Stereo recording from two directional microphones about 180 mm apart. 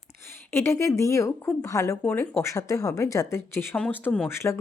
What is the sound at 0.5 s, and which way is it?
Speech, 15° left (ahead or behind).